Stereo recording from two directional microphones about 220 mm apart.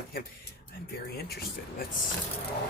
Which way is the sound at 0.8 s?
45° left (ahead or behind).